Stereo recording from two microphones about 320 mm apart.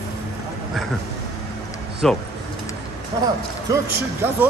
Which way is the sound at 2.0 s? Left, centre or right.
Centre.